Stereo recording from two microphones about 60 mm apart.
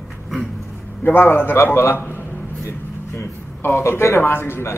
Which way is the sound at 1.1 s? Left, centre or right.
Left.